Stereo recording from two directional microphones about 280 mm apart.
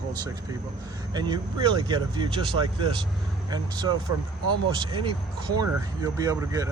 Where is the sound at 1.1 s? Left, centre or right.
Centre.